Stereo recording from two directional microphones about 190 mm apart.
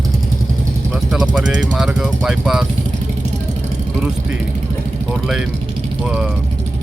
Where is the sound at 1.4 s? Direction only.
75° right (ahead or behind).